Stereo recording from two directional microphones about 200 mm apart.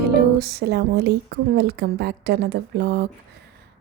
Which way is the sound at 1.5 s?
55° right (ahead or behind).